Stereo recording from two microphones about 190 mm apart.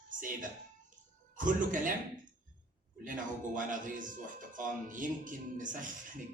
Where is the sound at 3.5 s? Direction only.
45° right (ahead or behind).